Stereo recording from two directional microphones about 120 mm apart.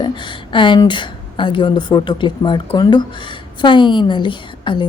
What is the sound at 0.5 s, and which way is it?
Speech, 40° left (ahead or behind).